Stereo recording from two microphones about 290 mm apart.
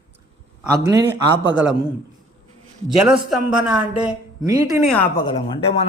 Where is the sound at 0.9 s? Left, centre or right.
Centre.